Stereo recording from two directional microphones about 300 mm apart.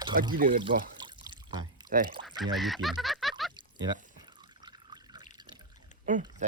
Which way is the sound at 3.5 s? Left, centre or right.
Centre.